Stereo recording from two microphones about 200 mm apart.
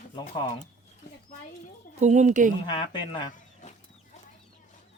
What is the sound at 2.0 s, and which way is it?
Speech, 35° right (ahead or behind).